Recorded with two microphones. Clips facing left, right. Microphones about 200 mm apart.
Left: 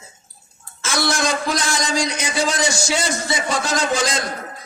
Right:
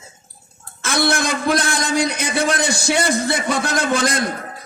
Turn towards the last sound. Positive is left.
turn(degrees=-60)  # may be behind; listen again after turning